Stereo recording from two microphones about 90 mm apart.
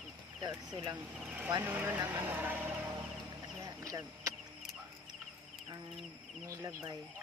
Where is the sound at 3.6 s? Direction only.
40° right (ahead or behind).